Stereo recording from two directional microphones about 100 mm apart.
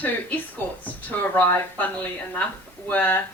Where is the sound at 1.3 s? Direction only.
20° left (ahead or behind).